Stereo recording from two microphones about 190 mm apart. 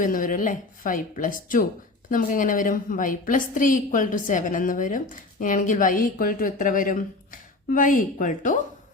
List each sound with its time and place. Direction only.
0.0 s a woman's voice: 45° left (ahead or behind)